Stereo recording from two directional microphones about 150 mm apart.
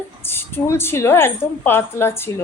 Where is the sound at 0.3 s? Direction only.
15° left (ahead or behind).